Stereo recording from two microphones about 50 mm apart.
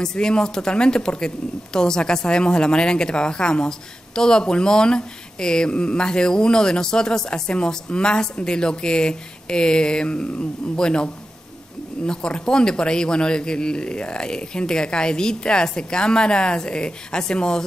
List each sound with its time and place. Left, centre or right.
0.0 s speech: centre